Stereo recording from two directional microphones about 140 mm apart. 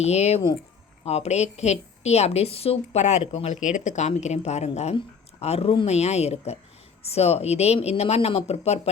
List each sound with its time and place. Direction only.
0.0 s a woman's voice: 50° left (ahead or behind)